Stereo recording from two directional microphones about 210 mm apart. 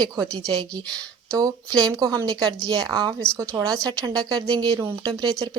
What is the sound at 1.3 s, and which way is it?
A woman's voice, 15° right (ahead or behind).